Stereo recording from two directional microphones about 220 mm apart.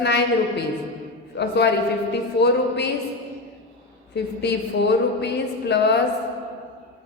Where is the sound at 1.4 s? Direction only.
50° left (ahead or behind).